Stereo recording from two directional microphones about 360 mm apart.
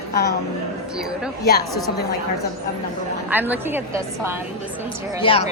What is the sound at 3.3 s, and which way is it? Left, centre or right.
A woman's voice, centre.